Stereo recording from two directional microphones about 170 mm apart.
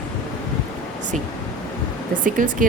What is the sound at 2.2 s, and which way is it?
Speech, 50° right (ahead or behind).